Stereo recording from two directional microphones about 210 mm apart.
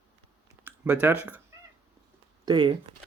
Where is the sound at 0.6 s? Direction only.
10° right (ahead or behind).